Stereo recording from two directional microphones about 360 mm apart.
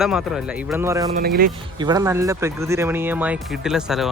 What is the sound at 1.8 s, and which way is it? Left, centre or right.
Speech, centre.